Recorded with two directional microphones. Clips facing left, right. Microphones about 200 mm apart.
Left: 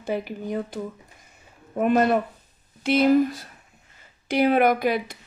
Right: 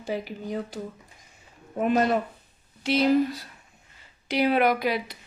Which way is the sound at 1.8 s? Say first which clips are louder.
Left 3 dB; 55° left (ahead or behind).